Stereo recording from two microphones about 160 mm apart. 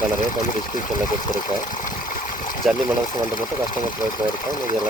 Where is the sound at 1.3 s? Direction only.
55° left (ahead or behind).